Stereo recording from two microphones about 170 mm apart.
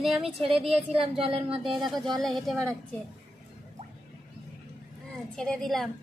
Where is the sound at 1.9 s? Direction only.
Centre (ahead or behind).